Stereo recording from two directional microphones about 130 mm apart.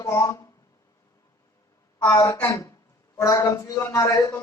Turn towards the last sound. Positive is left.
turn(degrees=25)  # may be behind; listen again after turning